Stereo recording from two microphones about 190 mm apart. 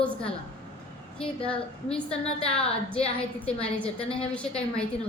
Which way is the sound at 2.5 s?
5° left (ahead or behind).